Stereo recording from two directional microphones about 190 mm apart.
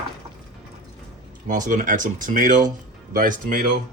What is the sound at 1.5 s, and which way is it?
Speech, 45° right (ahead or behind).